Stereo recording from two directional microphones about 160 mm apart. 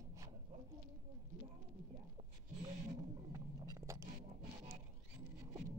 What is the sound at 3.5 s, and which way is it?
Music, 20° right (ahead or behind).